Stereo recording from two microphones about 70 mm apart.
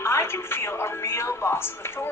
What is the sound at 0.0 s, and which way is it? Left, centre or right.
A woman's voice, left.